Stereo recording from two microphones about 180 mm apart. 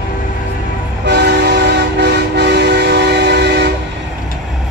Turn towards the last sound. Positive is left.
turn(degrees=-70)  # may be behind; listen again after turning